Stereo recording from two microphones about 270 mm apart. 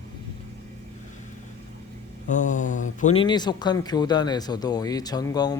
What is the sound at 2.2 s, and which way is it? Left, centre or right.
Mantra, left.